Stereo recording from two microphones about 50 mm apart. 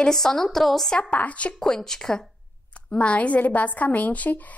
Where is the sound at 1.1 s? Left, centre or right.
Left.